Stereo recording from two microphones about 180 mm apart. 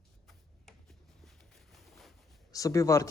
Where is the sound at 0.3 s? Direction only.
Centre (ahead or behind).